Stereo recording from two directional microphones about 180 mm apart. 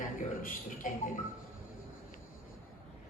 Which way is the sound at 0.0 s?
50° left (ahead or behind).